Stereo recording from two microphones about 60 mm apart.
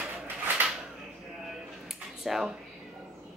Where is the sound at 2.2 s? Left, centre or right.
Centre.